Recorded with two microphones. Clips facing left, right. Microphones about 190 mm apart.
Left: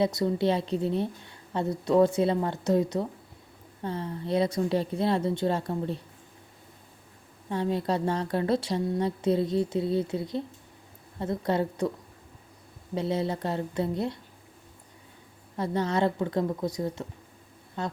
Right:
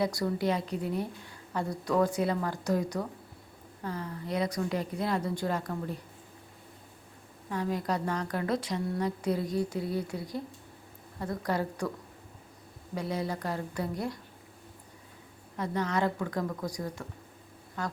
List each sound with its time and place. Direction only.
0.0 s a woman's voice: 20° left (ahead or behind)
7.5 s a woman's voice: 30° left (ahead or behind)
12.9 s a woman's voice: 25° left (ahead or behind)
15.5 s a woman's voice: 30° left (ahead or behind)